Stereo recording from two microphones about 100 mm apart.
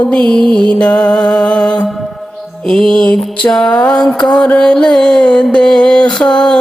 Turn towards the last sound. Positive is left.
turn(degrees=5)  # may be behind; listen again after turning